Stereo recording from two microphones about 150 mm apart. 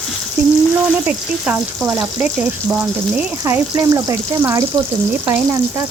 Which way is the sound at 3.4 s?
20° right (ahead or behind).